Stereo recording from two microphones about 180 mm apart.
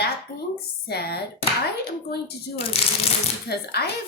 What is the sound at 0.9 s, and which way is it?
Speech, 65° left (ahead or behind).